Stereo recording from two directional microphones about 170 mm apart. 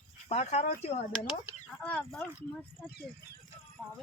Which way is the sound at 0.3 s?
40° left (ahead or behind).